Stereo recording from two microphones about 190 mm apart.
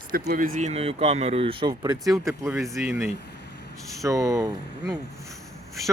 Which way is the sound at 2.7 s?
Centre (ahead or behind).